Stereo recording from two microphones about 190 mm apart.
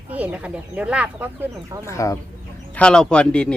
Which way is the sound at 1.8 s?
15° left (ahead or behind).